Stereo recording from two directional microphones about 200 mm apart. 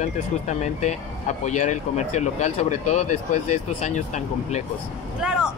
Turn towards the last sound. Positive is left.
turn(degrees=-5)  # may be behind; listen again after turning